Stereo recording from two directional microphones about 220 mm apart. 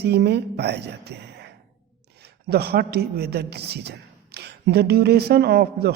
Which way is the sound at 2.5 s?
45° right (ahead or behind).